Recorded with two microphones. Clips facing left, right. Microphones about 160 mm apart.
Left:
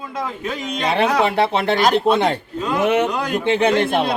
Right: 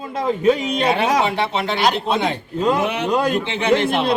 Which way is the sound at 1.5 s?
55° left (ahead or behind).